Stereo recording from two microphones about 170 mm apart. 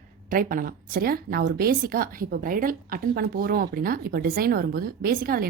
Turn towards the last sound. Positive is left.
turn(degrees=-60)  # may be behind; listen again after turning